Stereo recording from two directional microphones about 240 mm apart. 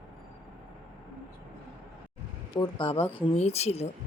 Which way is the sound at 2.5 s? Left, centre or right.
Left.